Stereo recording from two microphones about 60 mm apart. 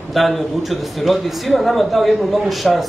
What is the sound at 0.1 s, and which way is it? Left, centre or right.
A man's voice, centre.